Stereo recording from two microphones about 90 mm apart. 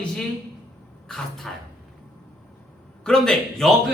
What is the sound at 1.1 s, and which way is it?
Speech, 5° left (ahead or behind).